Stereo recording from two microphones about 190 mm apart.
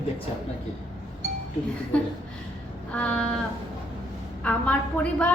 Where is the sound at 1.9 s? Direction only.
5° left (ahead or behind).